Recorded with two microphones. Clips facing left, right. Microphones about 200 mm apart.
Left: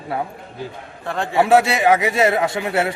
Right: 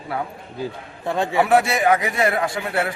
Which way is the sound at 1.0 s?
20° right (ahead or behind).